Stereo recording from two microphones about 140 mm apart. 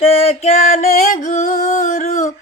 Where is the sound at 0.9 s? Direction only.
60° left (ahead or behind).